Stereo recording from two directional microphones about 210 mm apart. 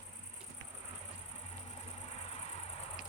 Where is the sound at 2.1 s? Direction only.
30° left (ahead or behind).